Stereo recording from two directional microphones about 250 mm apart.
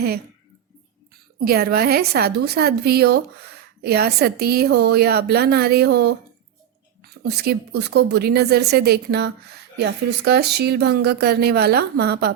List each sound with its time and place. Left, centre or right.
1.4 s a woman's voice: right
7.2 s a woman's voice: right